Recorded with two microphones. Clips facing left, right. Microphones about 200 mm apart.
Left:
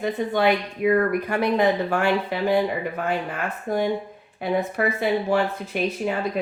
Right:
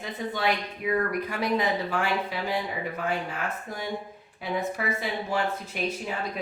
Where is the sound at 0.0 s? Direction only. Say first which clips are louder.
Left 8 dB; 60° left (ahead or behind).